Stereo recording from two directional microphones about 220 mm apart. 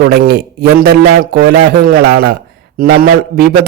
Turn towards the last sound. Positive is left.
turn(degrees=-40)  # may be behind; listen again after turning